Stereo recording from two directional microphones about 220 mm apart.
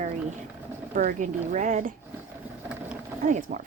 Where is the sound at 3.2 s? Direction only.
35° right (ahead or behind).